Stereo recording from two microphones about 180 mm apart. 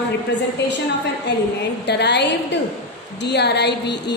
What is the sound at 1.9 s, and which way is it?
Speech, 70° left (ahead or behind).